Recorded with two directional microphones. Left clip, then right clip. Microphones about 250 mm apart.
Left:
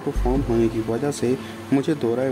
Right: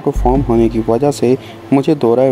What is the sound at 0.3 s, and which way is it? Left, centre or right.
Speech, right.